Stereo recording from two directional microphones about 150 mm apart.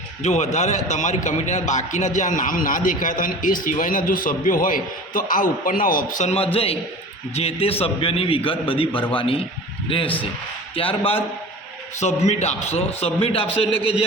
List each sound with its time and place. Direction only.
0.2 s a man's voice: 50° left (ahead or behind)
6.3 s a man's voice: 40° left (ahead or behind)